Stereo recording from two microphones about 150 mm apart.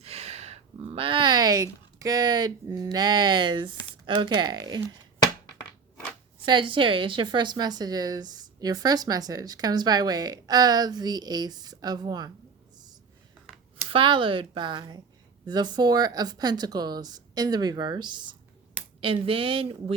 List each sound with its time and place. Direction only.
0.0 s speech: 45° right (ahead or behind); by 4.9 s 25° right (ahead or behind)
6.4 s a woman's voice: 30° right (ahead or behind)
13.9 s a woman's voice: 35° right (ahead or behind)